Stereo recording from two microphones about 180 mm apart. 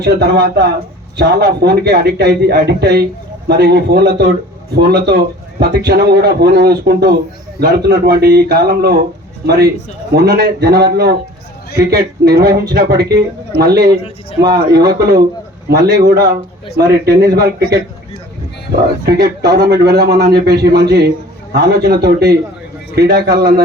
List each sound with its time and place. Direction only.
0.0 s a man's voice: 65° right (ahead or behind)
10.1 s a man's voice: 65° right (ahead or behind)
19.0 s a man's voice: 65° right (ahead or behind)